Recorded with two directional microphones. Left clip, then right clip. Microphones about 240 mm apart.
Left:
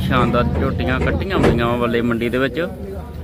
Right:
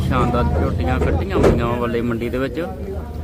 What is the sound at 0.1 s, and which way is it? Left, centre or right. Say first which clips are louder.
Speech: left 2 dB; centre.